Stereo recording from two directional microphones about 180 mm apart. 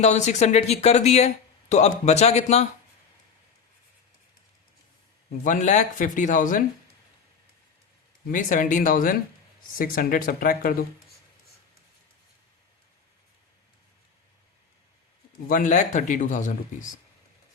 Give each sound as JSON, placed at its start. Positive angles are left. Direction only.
{"t": 0.0, "sound": "speech", "side_deg": 40}
{"t": 5.4, "sound": "speech", "side_deg": 45}
{"t": 8.3, "sound": "speech", "side_deg": 45}
{"t": 15.4, "sound": "speech", "side_deg": 45}